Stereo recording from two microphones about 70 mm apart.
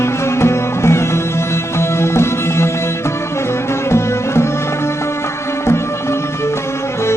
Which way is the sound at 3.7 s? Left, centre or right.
Left.